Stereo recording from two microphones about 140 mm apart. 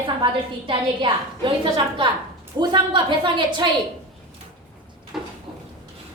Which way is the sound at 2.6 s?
35° right (ahead or behind).